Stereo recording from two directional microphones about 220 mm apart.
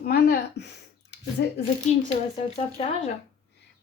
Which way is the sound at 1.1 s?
50° left (ahead or behind).